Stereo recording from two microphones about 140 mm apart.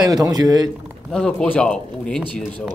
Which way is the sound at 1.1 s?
5° left (ahead or behind).